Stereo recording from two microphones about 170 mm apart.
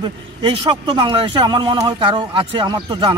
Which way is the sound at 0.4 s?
30° right (ahead or behind).